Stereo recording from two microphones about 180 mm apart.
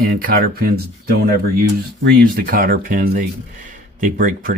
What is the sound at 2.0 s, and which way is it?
Speech, 55° right (ahead or behind).